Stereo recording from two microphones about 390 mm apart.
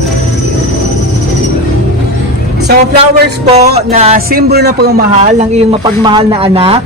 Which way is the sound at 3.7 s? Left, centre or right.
Centre.